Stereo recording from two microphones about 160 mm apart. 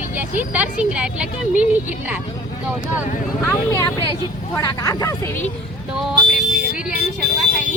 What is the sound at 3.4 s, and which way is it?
Speech, 20° left (ahead or behind).